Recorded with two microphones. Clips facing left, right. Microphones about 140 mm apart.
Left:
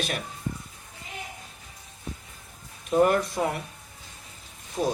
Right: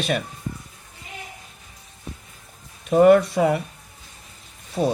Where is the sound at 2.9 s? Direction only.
85° right.